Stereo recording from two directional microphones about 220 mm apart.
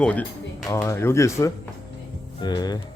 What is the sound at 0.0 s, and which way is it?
Speech, 5° left (ahead or behind).